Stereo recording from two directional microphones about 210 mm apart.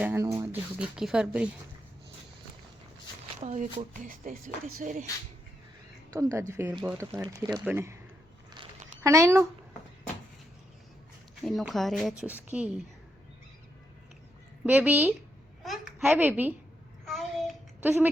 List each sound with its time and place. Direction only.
0.0 s speech: 10° right (ahead or behind)
3.4 s speech: 30° right (ahead or behind)
6.5 s speech: 10° right (ahead or behind)
9.0 s speech: 15° right (ahead or behind)
11.4 s speech: centre (ahead or behind)
14.6 s a child's voice: 10° right (ahead or behind)
17.1 s a sound: centre (ahead or behind)